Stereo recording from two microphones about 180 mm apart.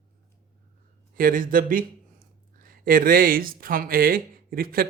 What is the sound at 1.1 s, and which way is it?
Speech, 50° right (ahead or behind).